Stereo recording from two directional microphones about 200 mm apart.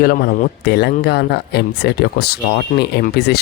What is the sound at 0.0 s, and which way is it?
Speech, 50° left (ahead or behind).